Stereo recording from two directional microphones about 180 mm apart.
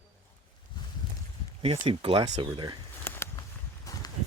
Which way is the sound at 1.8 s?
30° right (ahead or behind).